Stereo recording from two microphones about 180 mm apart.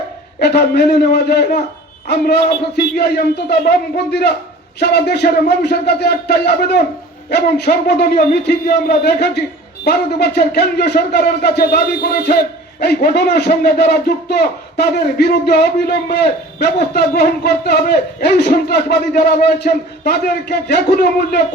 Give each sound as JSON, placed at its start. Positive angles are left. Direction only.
{"t": 0.3, "sound": "a man's voice", "side_deg": 65}